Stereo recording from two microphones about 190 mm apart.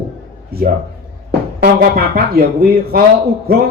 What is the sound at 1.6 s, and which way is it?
Speech, 55° right (ahead or behind).